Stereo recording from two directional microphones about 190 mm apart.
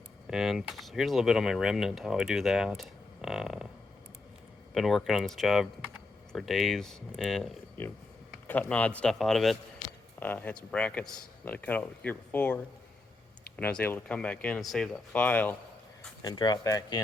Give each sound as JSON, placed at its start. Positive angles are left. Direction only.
{"t": 0.3, "sound": "speech", "side_deg": 0}
{"t": 4.7, "sound": "speech", "side_deg": 0}
{"t": 13.6, "sound": "speech", "side_deg": 10}
{"t": 16.2, "sound": "speech", "side_deg": 25}